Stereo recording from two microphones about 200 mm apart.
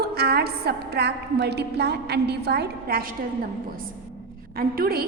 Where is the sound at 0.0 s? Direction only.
50° right (ahead or behind).